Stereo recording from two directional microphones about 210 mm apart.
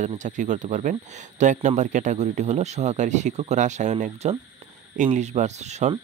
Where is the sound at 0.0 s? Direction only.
35° right (ahead or behind).